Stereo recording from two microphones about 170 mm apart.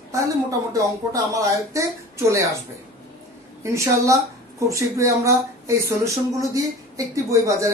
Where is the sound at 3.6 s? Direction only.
15° right (ahead or behind).